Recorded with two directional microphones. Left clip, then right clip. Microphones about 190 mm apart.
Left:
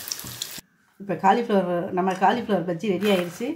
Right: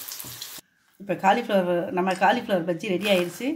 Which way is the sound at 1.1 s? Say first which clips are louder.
Left 1 dB; 40° right (ahead or behind).